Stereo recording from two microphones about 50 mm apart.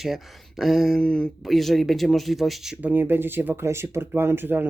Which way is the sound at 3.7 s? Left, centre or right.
Right.